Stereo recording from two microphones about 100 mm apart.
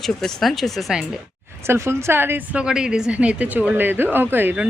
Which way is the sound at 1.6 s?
25° right (ahead or behind).